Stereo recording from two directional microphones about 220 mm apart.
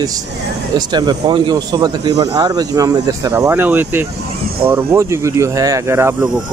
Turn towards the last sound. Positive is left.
turn(degrees=-10)  # may be behind; listen again after turning